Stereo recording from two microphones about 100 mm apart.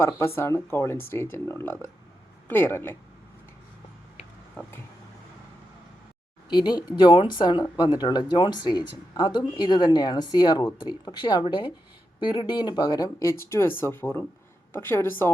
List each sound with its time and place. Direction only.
0.3 s speech: 25° left (ahead or behind)
6.5 s speech: 45° left (ahead or behind); by 15.3 s 20° left (ahead or behind)